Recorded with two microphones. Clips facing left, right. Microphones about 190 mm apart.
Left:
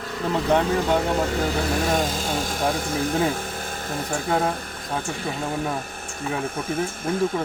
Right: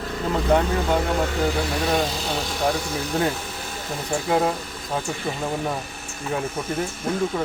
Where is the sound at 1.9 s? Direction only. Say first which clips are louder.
Even; 45° left (ahead or behind).